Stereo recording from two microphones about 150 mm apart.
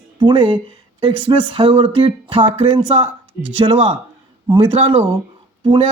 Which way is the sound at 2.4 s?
50° right (ahead or behind).